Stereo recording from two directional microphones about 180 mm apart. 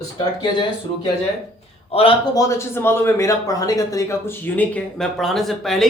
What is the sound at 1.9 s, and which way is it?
Speech, 30° left (ahead or behind).